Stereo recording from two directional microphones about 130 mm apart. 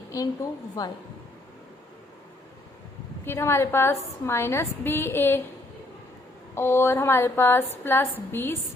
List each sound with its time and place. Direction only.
0.1 s a woman's voice: 25° left (ahead or behind)
3.2 s a woman's voice: 20° left (ahead or behind)
6.5 s speech: 20° left (ahead or behind)